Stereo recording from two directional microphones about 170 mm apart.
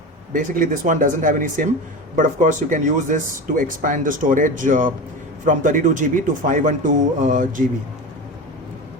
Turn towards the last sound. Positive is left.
turn(degrees=-50)  # may be behind; listen again after turning